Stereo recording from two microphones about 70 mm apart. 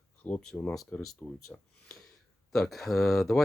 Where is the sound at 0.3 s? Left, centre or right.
Centre.